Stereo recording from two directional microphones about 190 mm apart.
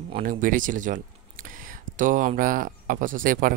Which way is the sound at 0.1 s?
45° right (ahead or behind).